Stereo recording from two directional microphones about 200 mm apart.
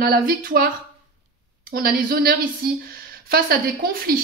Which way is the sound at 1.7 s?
50° right (ahead or behind).